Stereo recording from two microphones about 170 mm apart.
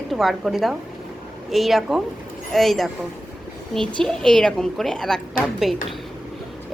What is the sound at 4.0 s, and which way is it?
A woman's voice, 5° left (ahead or behind).